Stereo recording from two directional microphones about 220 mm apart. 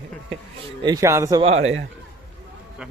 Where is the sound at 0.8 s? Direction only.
15° right (ahead or behind).